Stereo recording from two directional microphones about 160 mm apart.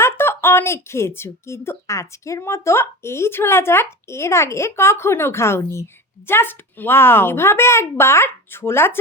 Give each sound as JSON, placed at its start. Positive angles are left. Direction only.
{"t": 0.0, "sound": "speech", "side_deg": 15}